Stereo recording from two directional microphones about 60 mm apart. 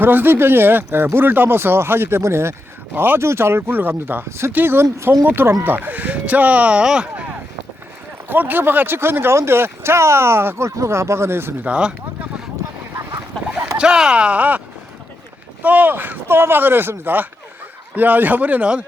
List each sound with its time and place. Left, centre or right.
0.0 s speech: right
2.9 s speech: right
3.2 s speech: right; by 7.3 s centre
8.3 s speech: right
10.7 s speech: right
11.6 s speech: centre
13.7 s speech: centre
15.6 s speech: right